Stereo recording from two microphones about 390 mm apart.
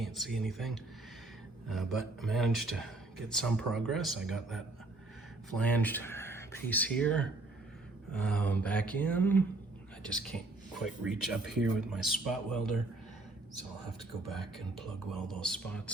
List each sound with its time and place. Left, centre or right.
0.0 s speech: centre
14.3 s speech: centre